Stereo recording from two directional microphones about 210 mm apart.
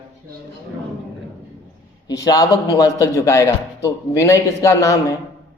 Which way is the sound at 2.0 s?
15° left (ahead or behind).